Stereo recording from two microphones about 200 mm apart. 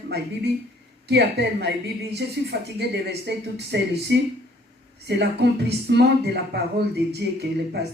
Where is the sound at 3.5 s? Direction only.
55° right (ahead or behind).